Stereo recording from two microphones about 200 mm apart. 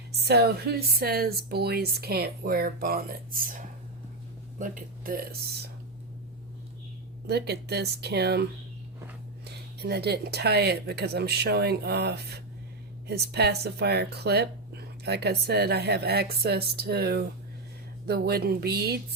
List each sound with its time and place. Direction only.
0.1 s speech: 55° right (ahead or behind)
4.6 s speech: 45° right (ahead or behind)
7.3 s speech: 55° right (ahead or behind)
9.8 s speech: 55° right (ahead or behind)